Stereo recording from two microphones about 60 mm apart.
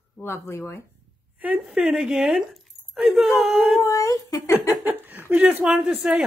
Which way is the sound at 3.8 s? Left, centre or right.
Left.